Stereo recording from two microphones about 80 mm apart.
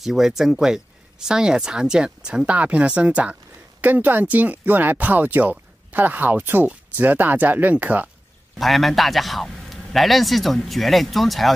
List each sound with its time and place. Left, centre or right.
0.0 s speech: centre
8.5 s a man's voice: centre